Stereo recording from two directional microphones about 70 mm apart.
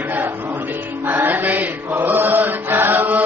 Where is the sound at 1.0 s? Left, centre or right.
Right.